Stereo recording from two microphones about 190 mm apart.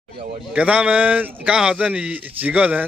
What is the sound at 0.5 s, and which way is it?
Speech, 5° right (ahead or behind).